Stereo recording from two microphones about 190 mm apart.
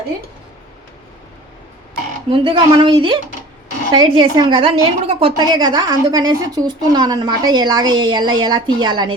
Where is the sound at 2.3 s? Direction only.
25° right (ahead or behind).